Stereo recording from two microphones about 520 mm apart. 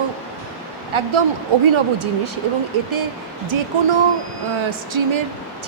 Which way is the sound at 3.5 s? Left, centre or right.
Right.